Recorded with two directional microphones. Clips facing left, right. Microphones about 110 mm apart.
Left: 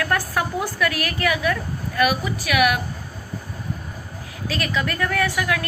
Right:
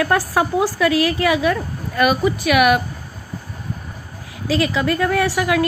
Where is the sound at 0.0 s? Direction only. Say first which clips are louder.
Right 5 dB; 20° right (ahead or behind).